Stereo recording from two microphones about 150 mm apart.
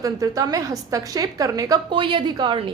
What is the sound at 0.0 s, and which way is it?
A woman's voice, 20° right (ahead or behind).